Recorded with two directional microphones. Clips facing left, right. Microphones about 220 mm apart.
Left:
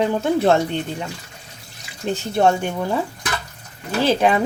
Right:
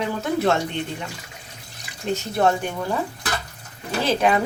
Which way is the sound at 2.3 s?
25° left (ahead or behind).